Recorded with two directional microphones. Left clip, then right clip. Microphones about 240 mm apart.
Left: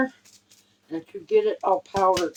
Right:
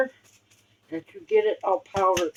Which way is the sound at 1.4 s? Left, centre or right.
Left.